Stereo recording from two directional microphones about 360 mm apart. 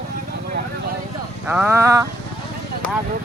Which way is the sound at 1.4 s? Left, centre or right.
Centre.